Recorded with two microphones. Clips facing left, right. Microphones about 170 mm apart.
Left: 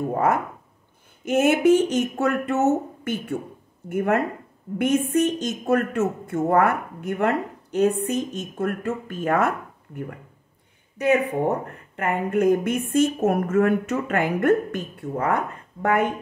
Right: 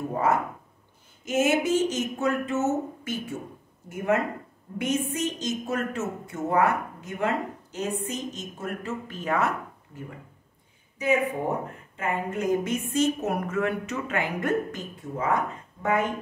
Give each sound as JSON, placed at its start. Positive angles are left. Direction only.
{"t": 0.1, "sound": "a woman's voice", "side_deg": 55}
{"t": 11.0, "sound": "a woman's voice", "side_deg": 65}